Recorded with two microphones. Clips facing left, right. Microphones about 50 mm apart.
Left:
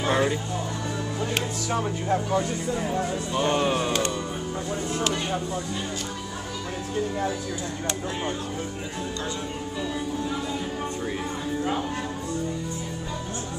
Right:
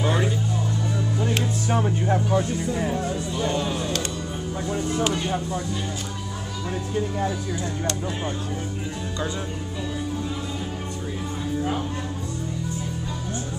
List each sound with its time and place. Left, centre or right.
1.8 s speech: centre
3.3 s speech: left